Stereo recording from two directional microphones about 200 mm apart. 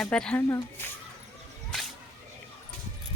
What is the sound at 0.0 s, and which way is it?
Speech, 5° left (ahead or behind).